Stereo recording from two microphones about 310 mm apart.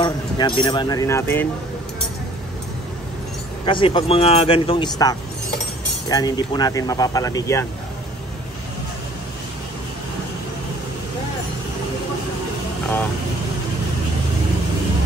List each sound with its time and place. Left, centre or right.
0.0 s speech: centre
3.6 s speech: centre